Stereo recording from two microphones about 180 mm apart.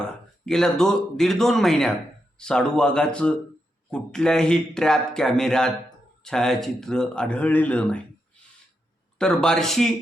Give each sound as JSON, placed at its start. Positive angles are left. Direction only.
{"t": 0.4, "sound": "speech", "side_deg": 5}
{"t": 9.1, "sound": "speech", "side_deg": 5}